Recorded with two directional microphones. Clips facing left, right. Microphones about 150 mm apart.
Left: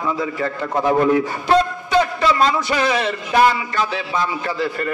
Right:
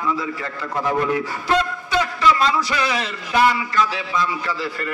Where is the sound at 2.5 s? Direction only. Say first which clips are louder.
Left 3 dB; 25° left (ahead or behind).